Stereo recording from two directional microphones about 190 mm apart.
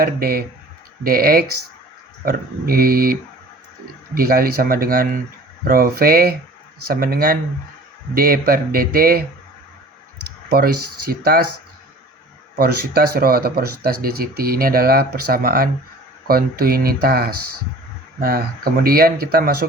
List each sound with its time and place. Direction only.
0.0 s speech: 50° right (ahead or behind)
10.5 s speech: 50° right (ahead or behind)
12.5 s speech: 50° right (ahead or behind)